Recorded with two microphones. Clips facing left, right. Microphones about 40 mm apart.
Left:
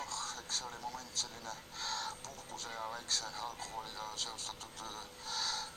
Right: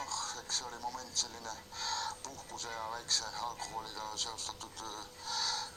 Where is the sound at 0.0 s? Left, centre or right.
Left.